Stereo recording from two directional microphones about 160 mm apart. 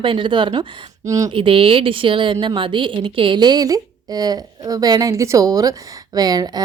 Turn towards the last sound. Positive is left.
turn(degrees=-25)  # may be behind; listen again after turning